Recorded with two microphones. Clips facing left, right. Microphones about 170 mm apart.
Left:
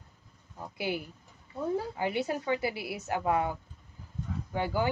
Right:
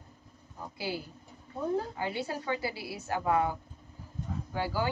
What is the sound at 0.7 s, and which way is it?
A woman's voice, 20° left (ahead or behind).